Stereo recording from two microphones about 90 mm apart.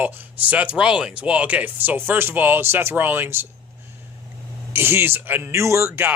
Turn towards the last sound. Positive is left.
turn(degrees=-25)  # may be behind; listen again after turning